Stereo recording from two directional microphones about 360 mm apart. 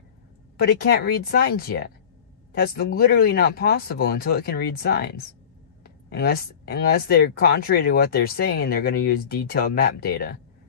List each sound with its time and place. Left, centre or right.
0.6 s speech: left